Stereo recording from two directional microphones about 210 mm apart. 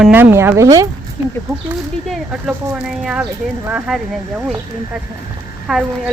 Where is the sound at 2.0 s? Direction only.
Centre (ahead or behind).